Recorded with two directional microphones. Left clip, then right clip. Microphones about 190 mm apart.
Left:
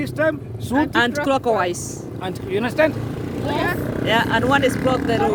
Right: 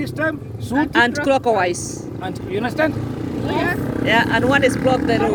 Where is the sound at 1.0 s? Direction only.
10° left (ahead or behind).